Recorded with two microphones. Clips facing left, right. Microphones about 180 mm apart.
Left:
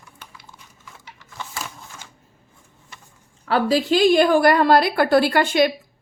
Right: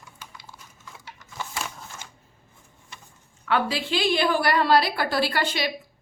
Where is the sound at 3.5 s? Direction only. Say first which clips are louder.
Left 7 dB; 40° left (ahead or behind).